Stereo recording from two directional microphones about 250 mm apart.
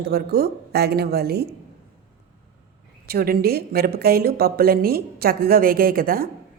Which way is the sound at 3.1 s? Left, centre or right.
Right.